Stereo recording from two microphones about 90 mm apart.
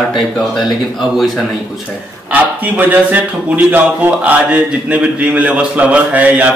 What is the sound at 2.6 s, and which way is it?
Speech, 20° right (ahead or behind).